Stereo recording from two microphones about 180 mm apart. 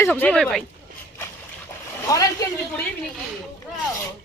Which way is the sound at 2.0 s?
20° left (ahead or behind).